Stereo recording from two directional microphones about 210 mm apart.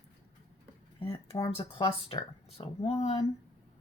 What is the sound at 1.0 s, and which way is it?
Speech, 25° left (ahead or behind).